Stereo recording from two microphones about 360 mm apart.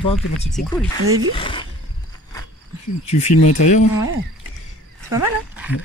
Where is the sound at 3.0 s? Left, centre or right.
Centre.